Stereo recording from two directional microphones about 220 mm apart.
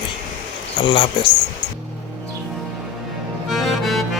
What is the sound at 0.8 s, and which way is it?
Speech, 20° left (ahead or behind).